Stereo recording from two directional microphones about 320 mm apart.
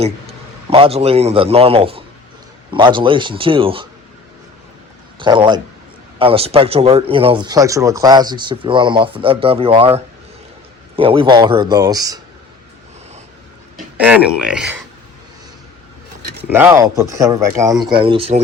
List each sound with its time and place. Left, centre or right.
0.7 s speech: centre
5.2 s speech: centre
13.7 s speech: centre
16.4 s speech: centre